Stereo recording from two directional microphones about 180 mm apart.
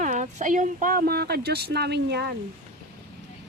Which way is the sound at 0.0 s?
45° right (ahead or behind).